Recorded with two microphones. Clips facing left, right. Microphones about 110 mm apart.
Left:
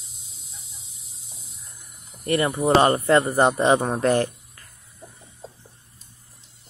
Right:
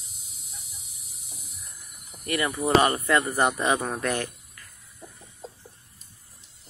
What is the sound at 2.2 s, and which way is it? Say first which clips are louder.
Speech: left 5 dB; 30° left (ahead or behind).